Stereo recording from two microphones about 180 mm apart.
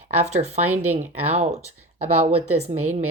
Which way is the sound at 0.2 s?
40° right (ahead or behind).